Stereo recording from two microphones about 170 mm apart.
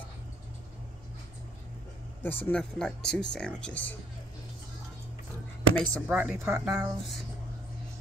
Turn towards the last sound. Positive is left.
turn(degrees=-20)  # may be behind; listen again after turning